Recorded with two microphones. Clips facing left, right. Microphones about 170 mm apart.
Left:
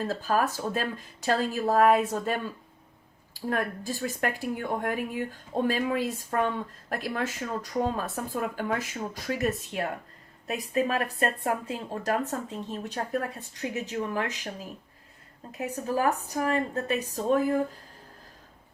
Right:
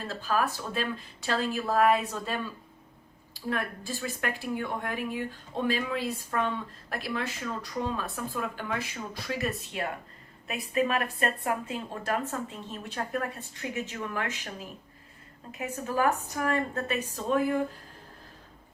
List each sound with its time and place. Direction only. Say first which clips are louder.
0.0 s speech: left 3 dB; 45° left (ahead or behind)
3.5 s speech: left 3 dB; 45° left (ahead or behind)
15.5 s speech: left 1 dB; 35° left (ahead or behind)